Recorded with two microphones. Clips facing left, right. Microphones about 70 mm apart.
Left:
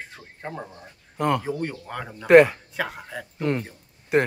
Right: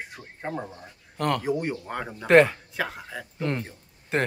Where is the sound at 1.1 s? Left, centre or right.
Centre.